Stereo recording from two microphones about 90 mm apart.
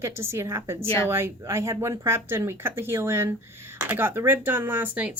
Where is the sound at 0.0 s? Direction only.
30° right (ahead or behind).